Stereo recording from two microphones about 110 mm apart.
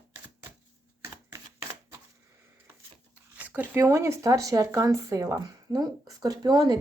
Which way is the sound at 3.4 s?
15° right (ahead or behind).